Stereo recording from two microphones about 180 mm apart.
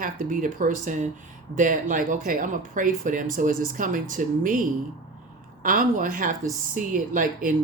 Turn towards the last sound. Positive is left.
turn(degrees=-45)  # may be behind; listen again after turning